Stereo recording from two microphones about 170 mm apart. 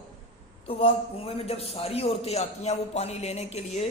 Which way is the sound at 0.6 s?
35° left (ahead or behind).